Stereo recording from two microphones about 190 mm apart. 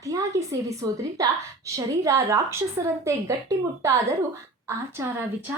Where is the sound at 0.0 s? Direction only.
15° right (ahead or behind).